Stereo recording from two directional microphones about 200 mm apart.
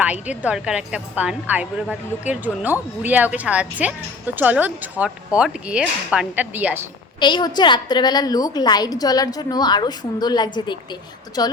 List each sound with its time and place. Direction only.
0.0 s a woman's voice: 5° right (ahead or behind)
7.2 s a woman's voice: 20° left (ahead or behind)